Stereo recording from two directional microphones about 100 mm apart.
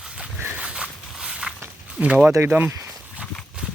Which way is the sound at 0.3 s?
15° right (ahead or behind).